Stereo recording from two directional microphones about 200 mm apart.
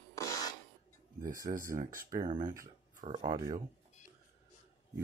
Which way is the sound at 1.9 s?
45° right (ahead or behind).